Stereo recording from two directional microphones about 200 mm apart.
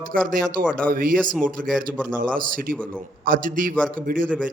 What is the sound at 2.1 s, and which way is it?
A man's voice, 45° right (ahead or behind).